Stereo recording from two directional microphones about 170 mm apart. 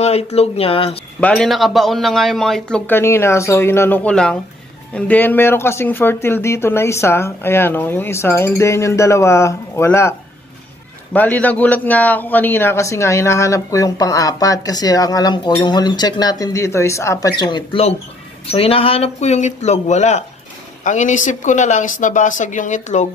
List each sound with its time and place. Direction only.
0.0 s speech: 40° left (ahead or behind)
1.2 s a man's voice: 5° left (ahead or behind)
11.1 s a man's voice: 10° left (ahead or behind); by 23.0 s 45° left (ahead or behind)